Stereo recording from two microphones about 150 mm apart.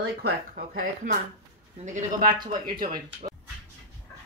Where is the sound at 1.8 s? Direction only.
55° right (ahead or behind).